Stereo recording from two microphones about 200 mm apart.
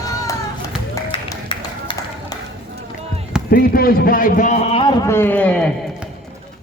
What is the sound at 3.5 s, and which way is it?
A man's voice, 45° left (ahead or behind).